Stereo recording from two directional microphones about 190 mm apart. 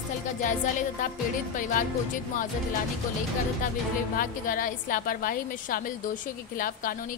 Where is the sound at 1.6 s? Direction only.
45° left (ahead or behind).